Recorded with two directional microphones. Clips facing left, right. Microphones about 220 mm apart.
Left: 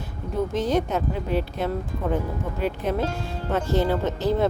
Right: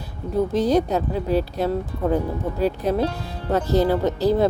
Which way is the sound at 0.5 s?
35° right (ahead or behind).